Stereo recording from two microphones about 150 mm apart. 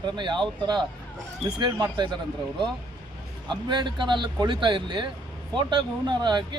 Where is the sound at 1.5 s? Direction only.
30° right (ahead or behind).